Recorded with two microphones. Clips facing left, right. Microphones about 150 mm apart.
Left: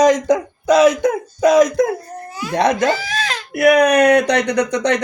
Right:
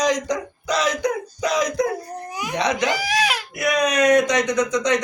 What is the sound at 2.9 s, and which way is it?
Baby cry, 10° right (ahead or behind).